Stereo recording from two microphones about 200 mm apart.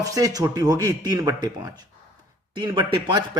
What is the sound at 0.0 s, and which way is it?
A man's voice, 15° right (ahead or behind).